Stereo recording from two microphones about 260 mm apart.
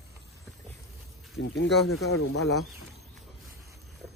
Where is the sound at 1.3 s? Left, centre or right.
Left.